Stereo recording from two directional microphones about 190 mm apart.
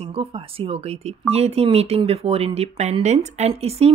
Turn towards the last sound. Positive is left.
turn(degrees=-35)  # may be behind; listen again after turning